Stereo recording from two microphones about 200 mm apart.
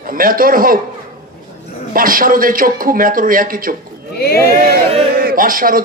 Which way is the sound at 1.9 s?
45° right (ahead or behind).